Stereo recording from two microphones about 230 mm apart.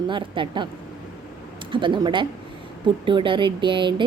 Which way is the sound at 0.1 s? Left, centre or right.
Right.